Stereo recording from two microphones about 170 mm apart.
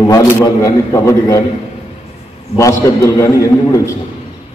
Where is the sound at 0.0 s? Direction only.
20° left (ahead or behind).